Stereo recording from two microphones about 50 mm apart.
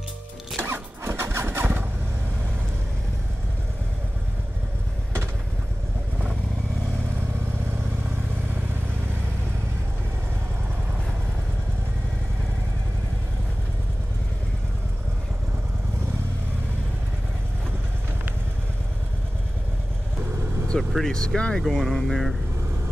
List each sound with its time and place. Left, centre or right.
0.6 s a sound: right
1.6 s vehicle: right
20.9 s speech: centre